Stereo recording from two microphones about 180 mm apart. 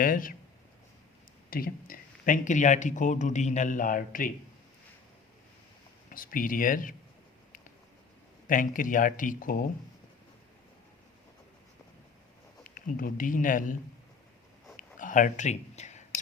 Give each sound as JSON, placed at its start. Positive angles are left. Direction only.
{"t": 0.0, "sound": "speech", "side_deg": 50}
{"t": 1.5, "sound": "speech", "side_deg": 55}
{"t": 6.1, "sound": "speech", "side_deg": 50}
{"t": 8.4, "sound": "speech", "side_deg": 50}
{"t": 12.6, "sound": "speech", "side_deg": 50}
{"t": 14.8, "sound": "a sound", "side_deg": 45}